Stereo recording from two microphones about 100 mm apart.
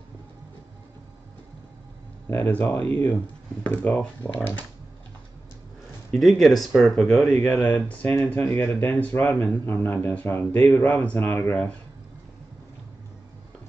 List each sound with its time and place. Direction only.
2.2 s a man's voice: 20° left (ahead or behind)
6.1 s speech: centre (ahead or behind)
7.4 s a man's voice: 10° left (ahead or behind)